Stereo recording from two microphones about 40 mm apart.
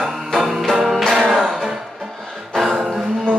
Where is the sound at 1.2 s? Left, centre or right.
Centre.